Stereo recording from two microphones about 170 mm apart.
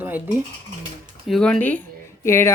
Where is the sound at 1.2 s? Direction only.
Centre (ahead or behind).